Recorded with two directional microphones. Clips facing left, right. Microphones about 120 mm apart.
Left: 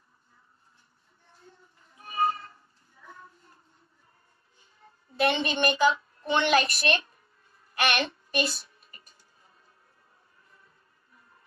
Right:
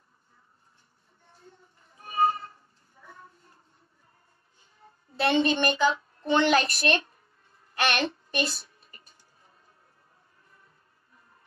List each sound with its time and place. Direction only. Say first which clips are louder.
3.0 s a sound: left 1 dB; 40° right (ahead or behind)
5.1 s a woman's voice: right 2 dB; 35° right (ahead or behind)
7.7 s child singing: right 1 dB; 30° right (ahead or behind)